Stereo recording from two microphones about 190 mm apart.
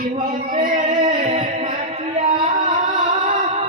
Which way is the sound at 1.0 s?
25° right (ahead or behind).